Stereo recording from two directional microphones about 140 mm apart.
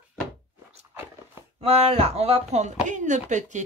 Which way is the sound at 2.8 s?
65° right (ahead or behind).